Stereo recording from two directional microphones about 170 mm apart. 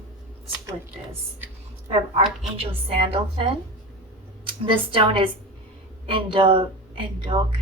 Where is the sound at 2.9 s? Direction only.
35° right (ahead or behind).